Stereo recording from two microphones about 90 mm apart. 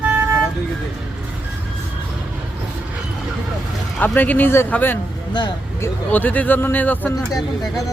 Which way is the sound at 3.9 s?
20° left (ahead or behind).